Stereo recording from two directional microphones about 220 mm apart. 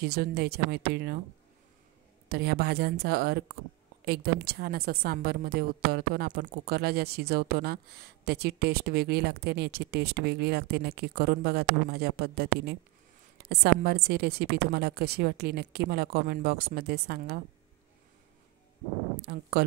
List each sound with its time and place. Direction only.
0.0 s a woman's voice: 45° right (ahead or behind)
2.2 s a woman's voice: 45° right (ahead or behind)